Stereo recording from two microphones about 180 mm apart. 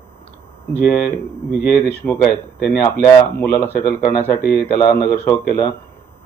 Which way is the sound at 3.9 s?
50° left (ahead or behind).